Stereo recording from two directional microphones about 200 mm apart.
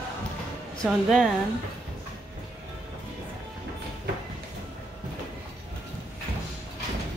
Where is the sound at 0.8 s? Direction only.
Centre (ahead or behind).